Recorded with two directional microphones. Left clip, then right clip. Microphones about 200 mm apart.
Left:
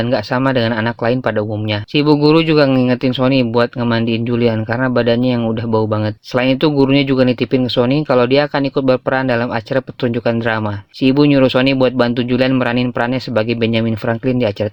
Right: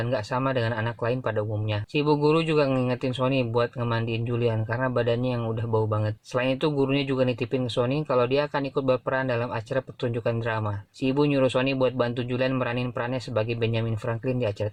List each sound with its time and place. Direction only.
0.1 s speech: 40° left (ahead or behind)